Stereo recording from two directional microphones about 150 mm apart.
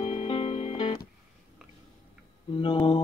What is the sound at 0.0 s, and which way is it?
Music, 35° left (ahead or behind).